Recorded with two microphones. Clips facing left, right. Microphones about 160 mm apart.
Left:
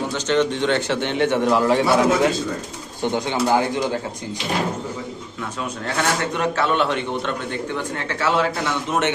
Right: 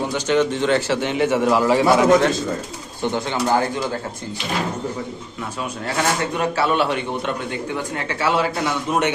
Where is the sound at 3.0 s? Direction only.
15° left (ahead or behind).